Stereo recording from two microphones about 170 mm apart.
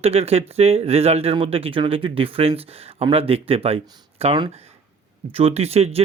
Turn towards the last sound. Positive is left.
turn(degrees=-35)  # may be behind; listen again after turning